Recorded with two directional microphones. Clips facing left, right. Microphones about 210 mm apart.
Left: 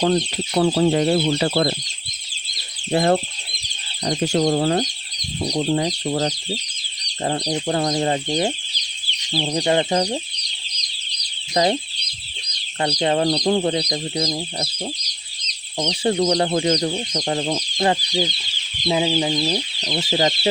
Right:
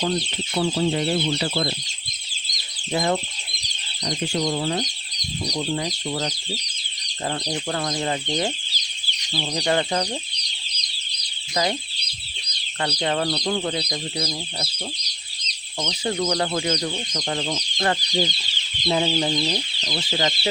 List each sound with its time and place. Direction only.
0.0 s speech: 55° left (ahead or behind)
2.9 s speech: 55° left (ahead or behind)
5.7 s speech: 40° left (ahead or behind)
7.4 s speech: 25° left (ahead or behind)
11.5 s speech: 35° left (ahead or behind)
12.8 s speech: 30° left (ahead or behind)
13.5 s speech: 30° left (ahead or behind)
15.8 s speech: 30° left (ahead or behind)
17.8 s chicken: 10° left (ahead or behind)
20.1 s speech: 30° left (ahead or behind)